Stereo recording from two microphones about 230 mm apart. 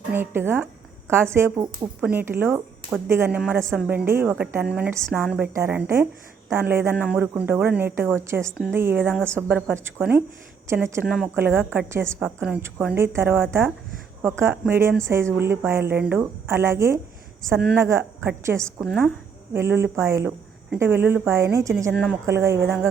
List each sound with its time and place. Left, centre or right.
0.1 s a woman's voice: centre